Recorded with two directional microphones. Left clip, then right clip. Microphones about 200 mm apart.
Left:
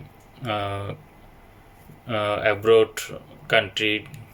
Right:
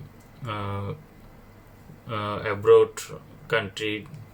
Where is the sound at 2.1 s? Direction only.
15° left (ahead or behind).